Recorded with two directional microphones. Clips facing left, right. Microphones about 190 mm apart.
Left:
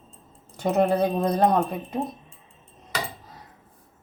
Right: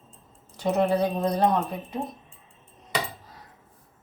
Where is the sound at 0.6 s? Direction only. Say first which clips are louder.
Left 2 dB; 50° left (ahead or behind).